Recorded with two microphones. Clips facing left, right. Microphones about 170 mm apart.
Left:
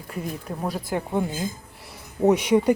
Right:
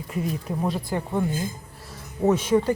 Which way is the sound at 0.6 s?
5° left (ahead or behind).